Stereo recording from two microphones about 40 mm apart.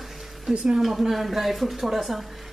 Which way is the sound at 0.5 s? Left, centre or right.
Centre.